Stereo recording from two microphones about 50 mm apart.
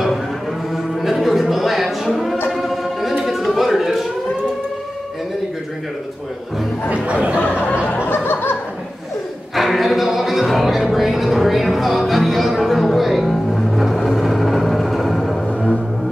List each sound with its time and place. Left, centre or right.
1.0 s a sound: centre
2.5 s music: centre
3.3 s chatter: centre
6.9 s a sound: right
8.1 s music: left
9.6 s music: centre